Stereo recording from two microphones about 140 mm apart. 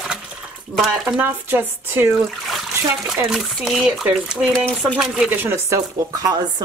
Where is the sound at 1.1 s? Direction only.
15° right (ahead or behind).